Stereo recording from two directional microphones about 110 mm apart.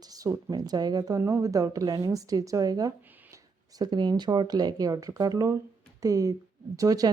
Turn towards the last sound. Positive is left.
turn(degrees=-30)  # may be behind; listen again after turning